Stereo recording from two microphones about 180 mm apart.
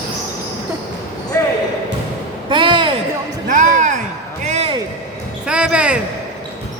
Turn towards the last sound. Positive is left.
turn(degrees=-5)  # may be behind; listen again after turning